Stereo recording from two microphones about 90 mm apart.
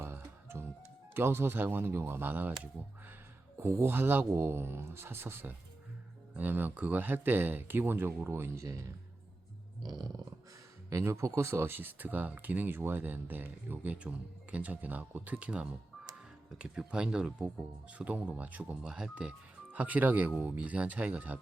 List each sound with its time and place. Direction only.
0.0 s music: 30° right (ahead or behind)
1.1 s speech: 25° right (ahead or behind)
10.8 s speech: 35° right (ahead or behind); by 21.3 s 15° right (ahead or behind)